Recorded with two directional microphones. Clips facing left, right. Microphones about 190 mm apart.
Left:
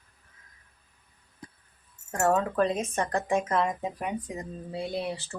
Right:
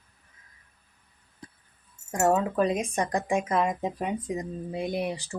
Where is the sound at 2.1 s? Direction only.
10° right (ahead or behind).